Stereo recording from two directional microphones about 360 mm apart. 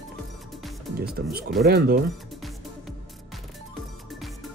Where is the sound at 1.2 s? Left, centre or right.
Right.